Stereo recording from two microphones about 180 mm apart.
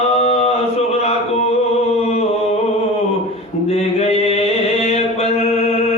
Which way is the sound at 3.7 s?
35° left (ahead or behind).